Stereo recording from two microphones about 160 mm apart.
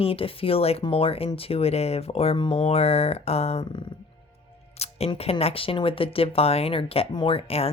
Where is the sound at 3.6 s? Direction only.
30° left (ahead or behind).